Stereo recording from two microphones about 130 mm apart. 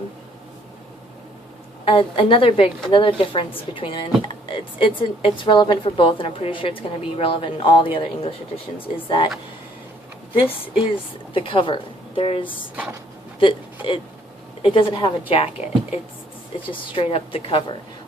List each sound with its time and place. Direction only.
1.8 s speech: 45° left (ahead or behind)
11.3 s a woman's voice: 40° left (ahead or behind)